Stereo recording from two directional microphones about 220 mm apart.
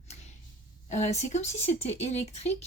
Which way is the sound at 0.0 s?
30° left (ahead or behind).